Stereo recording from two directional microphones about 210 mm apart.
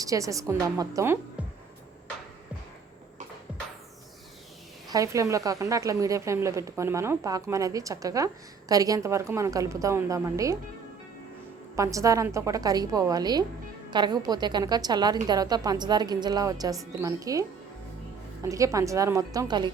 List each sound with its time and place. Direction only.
0.0 s a woman's voice: 15° right (ahead or behind)
4.9 s a woman's voice: 15° right (ahead or behind)
11.8 s a woman's voice: 15° right (ahead or behind)
18.4 s a woman's voice: 15° right (ahead or behind)